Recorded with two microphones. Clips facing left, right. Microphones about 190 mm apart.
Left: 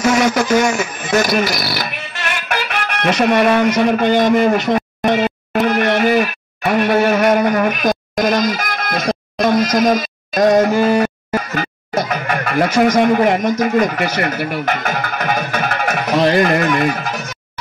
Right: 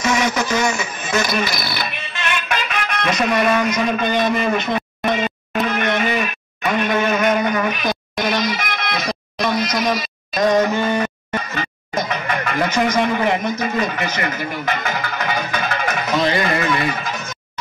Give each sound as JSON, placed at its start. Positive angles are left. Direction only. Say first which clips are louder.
{"t": 0.0, "sound": "speech", "louder": "left 5 dB", "side_deg": 45}
{"t": 3.0, "sound": "a man's voice", "louder": "left 5 dB", "side_deg": 60}
{"t": 4.1, "sound": "a man's voice", "louder": "left 6 dB", "side_deg": 40}
{"t": 5.5, "sound": "music", "louder": "left 5 dB", "side_deg": 45}
{"t": 13.6, "sound": "speech", "louder": "left 6 dB", "side_deg": 45}
{"t": 14.6, "sound": "music", "louder": "left 3 dB", "side_deg": 55}